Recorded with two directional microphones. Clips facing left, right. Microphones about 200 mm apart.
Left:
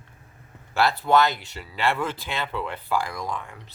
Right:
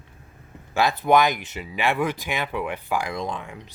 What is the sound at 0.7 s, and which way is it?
Speech, 15° right (ahead or behind).